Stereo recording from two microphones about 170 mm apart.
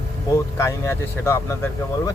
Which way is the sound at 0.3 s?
15° left (ahead or behind).